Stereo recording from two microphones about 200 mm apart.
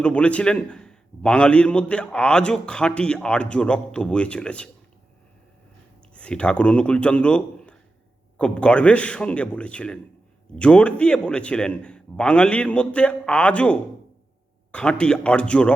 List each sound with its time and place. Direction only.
0.0 s a man's voice: 5° left (ahead or behind)
6.1 s a man's voice: 5° left (ahead or behind)